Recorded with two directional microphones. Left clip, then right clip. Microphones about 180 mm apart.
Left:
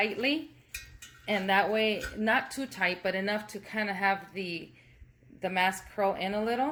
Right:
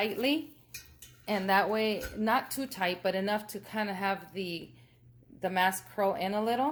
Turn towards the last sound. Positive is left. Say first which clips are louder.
# even
turn(degrees=-15)  # may be behind; listen again after turning